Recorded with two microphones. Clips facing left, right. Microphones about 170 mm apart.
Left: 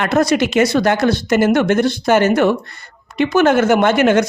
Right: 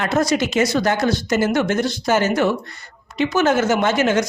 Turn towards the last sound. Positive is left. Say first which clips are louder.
# left 5 dB
turn(degrees=60)  # may be behind; listen again after turning